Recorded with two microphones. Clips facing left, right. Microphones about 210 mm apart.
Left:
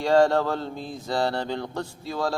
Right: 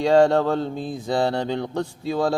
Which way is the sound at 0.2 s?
60° right (ahead or behind).